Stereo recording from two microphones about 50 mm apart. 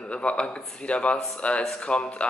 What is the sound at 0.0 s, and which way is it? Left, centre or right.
Speech, left.